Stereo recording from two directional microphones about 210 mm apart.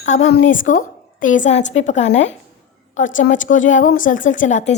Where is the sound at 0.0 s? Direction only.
35° left (ahead or behind).